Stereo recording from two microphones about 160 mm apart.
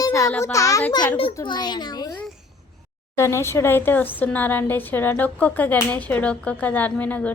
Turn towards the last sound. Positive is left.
turn(degrees=10)  # may be behind; listen again after turning